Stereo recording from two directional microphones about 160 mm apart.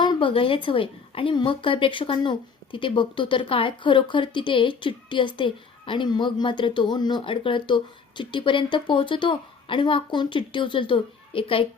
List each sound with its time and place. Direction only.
0.0 s a woman's voice: 30° left (ahead or behind)